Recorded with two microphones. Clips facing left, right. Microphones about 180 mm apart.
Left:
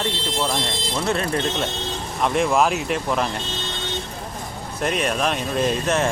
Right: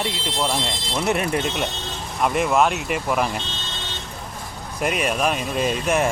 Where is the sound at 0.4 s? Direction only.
Centre (ahead or behind).